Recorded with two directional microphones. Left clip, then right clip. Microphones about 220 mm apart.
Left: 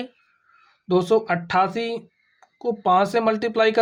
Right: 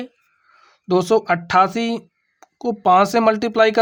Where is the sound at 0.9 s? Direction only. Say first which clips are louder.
Right 3 dB; 35° right (ahead or behind).